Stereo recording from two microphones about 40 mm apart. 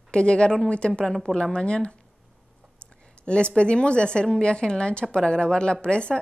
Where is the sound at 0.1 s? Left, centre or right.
Left.